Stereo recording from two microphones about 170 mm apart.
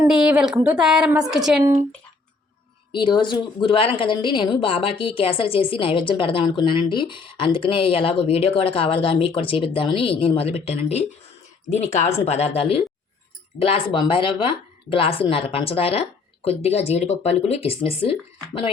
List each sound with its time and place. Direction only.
0.1 s a woman's voice: 5° right (ahead or behind)
2.9 s a woman's voice: 30° left (ahead or behind)